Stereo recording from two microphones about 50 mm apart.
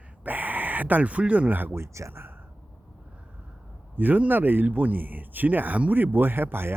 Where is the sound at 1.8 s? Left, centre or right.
Right.